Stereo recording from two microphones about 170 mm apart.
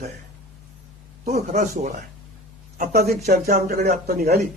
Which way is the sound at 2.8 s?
65° right (ahead or behind).